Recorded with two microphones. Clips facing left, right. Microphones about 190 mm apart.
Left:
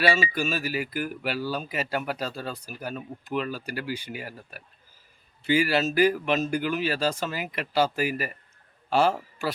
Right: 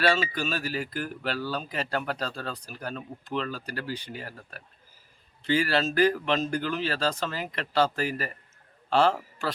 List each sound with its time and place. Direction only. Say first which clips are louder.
0.0 s a man's voice: left 1 dB; 10° left (ahead or behind)